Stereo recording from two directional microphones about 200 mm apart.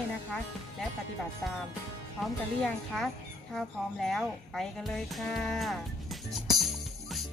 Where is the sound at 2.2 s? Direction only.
Centre (ahead or behind).